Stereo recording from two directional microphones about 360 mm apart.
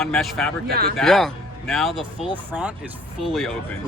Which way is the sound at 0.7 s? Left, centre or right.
Right.